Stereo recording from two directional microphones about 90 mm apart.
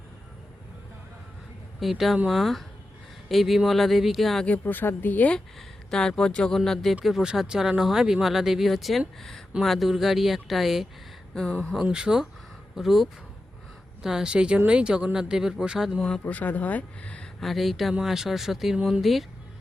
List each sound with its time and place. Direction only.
1.8 s speech: centre (ahead or behind)
4.4 s speech: 20° left (ahead or behind)
5.5 s speech: 5° left (ahead or behind); by 16.0 s 10° right (ahead or behind)
16.0 s speech: 5° left (ahead or behind)
16.2 s speech: 20° left (ahead or behind)
17.4 s speech: centre (ahead or behind)